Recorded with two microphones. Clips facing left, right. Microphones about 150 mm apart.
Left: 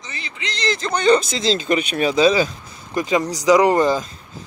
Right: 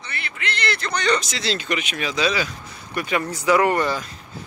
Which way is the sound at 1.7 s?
35° left (ahead or behind).